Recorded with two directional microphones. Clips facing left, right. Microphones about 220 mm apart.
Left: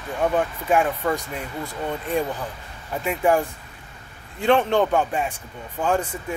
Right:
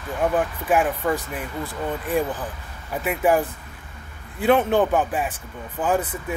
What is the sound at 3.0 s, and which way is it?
Speech, 5° right (ahead or behind).